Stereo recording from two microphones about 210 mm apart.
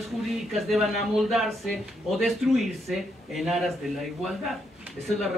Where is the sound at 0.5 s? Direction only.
Centre (ahead or behind).